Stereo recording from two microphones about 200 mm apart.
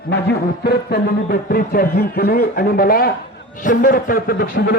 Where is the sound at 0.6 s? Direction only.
50° left (ahead or behind).